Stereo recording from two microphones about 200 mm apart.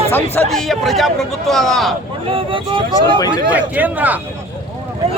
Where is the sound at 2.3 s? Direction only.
25° right (ahead or behind).